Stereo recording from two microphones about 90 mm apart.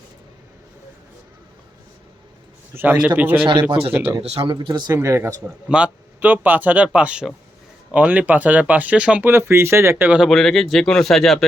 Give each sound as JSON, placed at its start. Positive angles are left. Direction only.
{"t": 2.7, "sound": "speech", "side_deg": -20}
{"t": 3.4, "sound": "speech", "side_deg": -70}
{"t": 4.4, "sound": "speech", "side_deg": -65}
{"t": 4.9, "sound": "speech", "side_deg": -30}
{"t": 5.6, "sound": "speech", "side_deg": -10}
{"t": 9.2, "sound": "speech", "side_deg": -30}
{"t": 10.2, "sound": "speech", "side_deg": 0}